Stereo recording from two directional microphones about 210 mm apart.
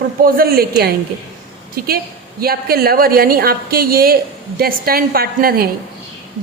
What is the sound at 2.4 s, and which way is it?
A woman's voice, 45° right (ahead or behind).